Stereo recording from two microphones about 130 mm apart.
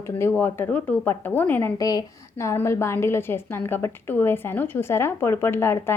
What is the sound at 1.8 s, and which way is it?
A woman's voice, 30° left (ahead or behind).